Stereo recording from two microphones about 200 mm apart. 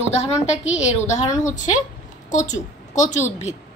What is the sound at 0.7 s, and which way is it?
A woman's voice, 35° left (ahead or behind).